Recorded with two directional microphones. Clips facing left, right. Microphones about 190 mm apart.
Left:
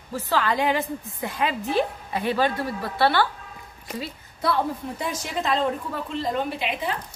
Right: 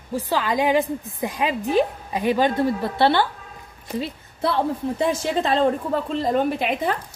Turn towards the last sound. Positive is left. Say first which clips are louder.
# right 5 dB
turn(degrees=-45)  # may be behind; listen again after turning